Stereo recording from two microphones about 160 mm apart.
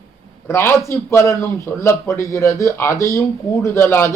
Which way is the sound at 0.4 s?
15° left (ahead or behind).